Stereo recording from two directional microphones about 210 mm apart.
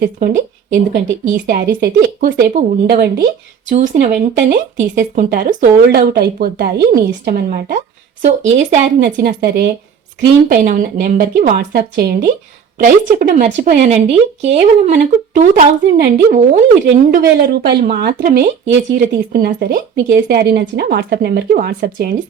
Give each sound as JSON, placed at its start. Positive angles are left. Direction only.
{"t": 0.0, "sound": "speech", "side_deg": -45}
{"t": 1.8, "sound": "speech", "side_deg": -45}
{"t": 8.2, "sound": "speech", "side_deg": -35}
{"t": 9.0, "sound": "speech", "side_deg": -45}
{"t": 16.8, "sound": "speech", "side_deg": -50}